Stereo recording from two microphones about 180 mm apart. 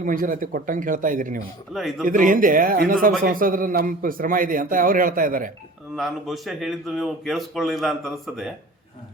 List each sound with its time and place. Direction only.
0.0 s a man's voice: 50° right (ahead or behind)
1.7 s a man's voice: centre (ahead or behind)
2.0 s a man's voice: 50° right (ahead or behind)
6.0 s a man's voice: centre (ahead or behind)